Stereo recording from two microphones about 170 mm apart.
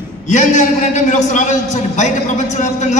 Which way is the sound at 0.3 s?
45° left (ahead or behind).